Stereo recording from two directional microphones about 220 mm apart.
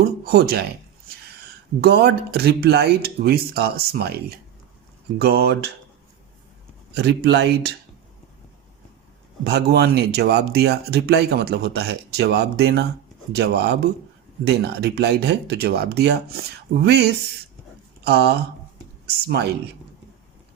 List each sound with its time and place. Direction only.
0.0 s speech: 45° right (ahead or behind)
1.8 s speech: 45° right (ahead or behind)
5.2 s speech: 45° right (ahead or behind)
6.9 s speech: 50° right (ahead or behind)
9.4 s speech: 50° right (ahead or behind)